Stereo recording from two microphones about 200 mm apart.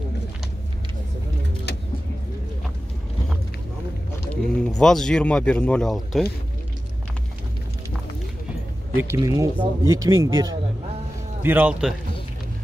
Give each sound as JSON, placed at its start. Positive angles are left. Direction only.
{"t": 1.7, "sound": "vehicle", "side_deg": 55}
{"t": 4.3, "sound": "speech", "side_deg": 5}
{"t": 8.9, "sound": "speech", "side_deg": -15}
{"t": 11.4, "sound": "speech", "side_deg": -10}